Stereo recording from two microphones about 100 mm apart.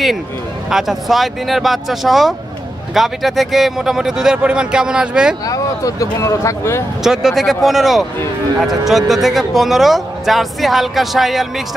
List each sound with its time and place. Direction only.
0.7 s speech: 5° right (ahead or behind)
5.5 s speech: 35° left (ahead or behind)
7.0 s speech: 5° right (ahead or behind)